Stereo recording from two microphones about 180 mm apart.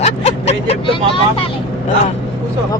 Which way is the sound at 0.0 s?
35° left (ahead or behind).